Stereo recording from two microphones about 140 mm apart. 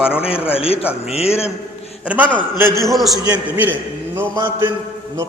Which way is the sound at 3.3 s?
15° right (ahead or behind).